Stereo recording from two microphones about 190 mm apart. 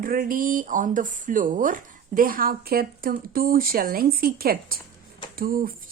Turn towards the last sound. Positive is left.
turn(degrees=-50)  # may be behind; listen again after turning